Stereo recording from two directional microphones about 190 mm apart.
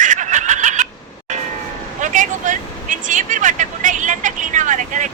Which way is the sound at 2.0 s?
40° right (ahead or behind).